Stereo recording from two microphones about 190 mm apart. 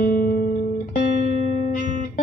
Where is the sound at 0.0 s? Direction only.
50° left (ahead or behind).